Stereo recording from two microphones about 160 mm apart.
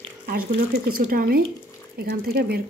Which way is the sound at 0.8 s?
65° right (ahead or behind).